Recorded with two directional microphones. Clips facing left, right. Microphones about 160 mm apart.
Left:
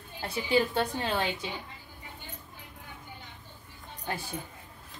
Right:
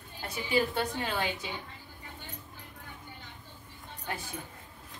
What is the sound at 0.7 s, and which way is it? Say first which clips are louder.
Speech: left 3 dB; 30° left (ahead or behind).